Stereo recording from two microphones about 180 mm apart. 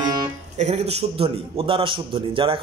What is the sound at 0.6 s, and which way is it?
A man's voice, 35° right (ahead or behind).